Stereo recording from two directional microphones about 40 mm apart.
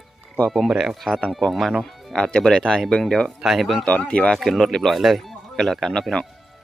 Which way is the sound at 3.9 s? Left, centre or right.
Left.